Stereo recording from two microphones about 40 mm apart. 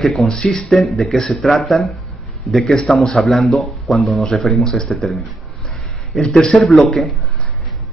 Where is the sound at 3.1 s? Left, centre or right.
Centre.